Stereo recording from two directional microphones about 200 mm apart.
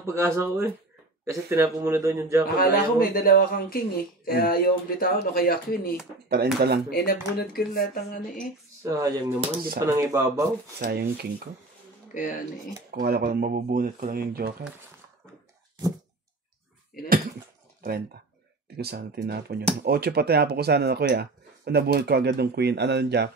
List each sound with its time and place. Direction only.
0.0 s speech: 15° right (ahead or behind)
2.5 s speech: 50° left (ahead or behind)
6.2 s speech: 50° right (ahead or behind)
6.9 s speech: 50° left (ahead or behind)
8.8 s speech: 15° right (ahead or behind)
10.8 s speech: 55° right (ahead or behind)
12.1 s speech: 40° left (ahead or behind)
12.9 s speech: 50° right (ahead or behind)
17.8 s speech: 50° right (ahead or behind)